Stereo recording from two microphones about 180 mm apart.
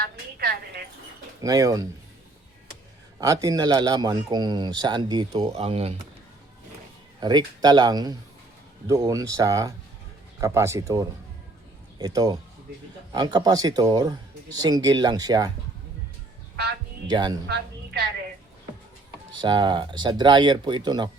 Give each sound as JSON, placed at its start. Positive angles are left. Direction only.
{"t": 0.0, "sound": "a woman's voice", "side_deg": -60}
{"t": 1.4, "sound": "speech", "side_deg": -20}
{"t": 3.2, "sound": "speech", "side_deg": -20}
{"t": 5.5, "sound": "speech", "side_deg": -35}
{"t": 7.2, "sound": "speech", "side_deg": -25}
{"t": 17.1, "sound": "speech", "side_deg": -25}
{"t": 17.4, "sound": "a woman's voice", "side_deg": -65}
{"t": 19.3, "sound": "speech", "side_deg": -25}